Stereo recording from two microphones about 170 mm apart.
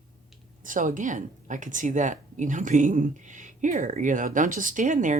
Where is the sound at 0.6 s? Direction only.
50° right (ahead or behind).